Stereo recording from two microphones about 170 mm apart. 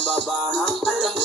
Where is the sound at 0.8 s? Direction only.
5° left (ahead or behind).